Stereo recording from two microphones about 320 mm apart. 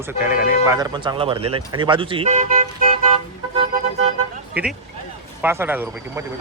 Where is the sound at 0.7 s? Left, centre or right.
Centre.